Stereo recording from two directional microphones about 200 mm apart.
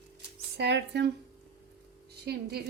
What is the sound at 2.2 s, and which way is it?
Speech, 55° right (ahead or behind).